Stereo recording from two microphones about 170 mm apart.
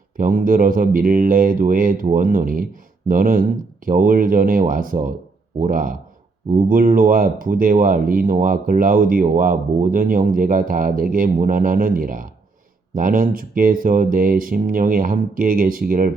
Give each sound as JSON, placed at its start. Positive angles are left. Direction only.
{"t": 0.2, "sound": "speech", "side_deg": -55}